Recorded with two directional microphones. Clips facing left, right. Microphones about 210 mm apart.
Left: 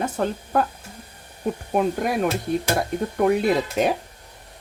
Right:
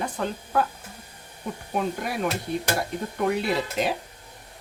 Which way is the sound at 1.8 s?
45° left (ahead or behind).